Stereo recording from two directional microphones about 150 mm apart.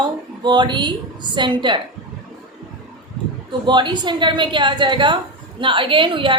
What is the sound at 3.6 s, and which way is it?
A woman's voice, 30° right (ahead or behind).